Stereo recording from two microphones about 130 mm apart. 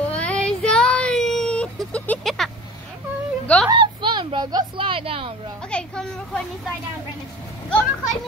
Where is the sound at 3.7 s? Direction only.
40° right (ahead or behind).